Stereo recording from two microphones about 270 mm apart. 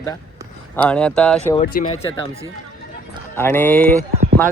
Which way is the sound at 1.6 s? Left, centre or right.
Left.